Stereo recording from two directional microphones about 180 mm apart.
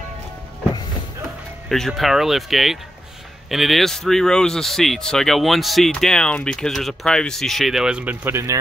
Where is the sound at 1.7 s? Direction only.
Centre (ahead or behind).